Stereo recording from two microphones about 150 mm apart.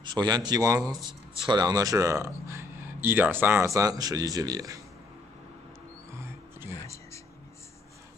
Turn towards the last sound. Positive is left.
turn(degrees=20)  # may be behind; listen again after turning